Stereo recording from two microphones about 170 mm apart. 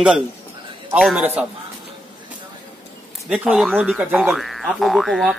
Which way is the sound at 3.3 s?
5° right (ahead or behind).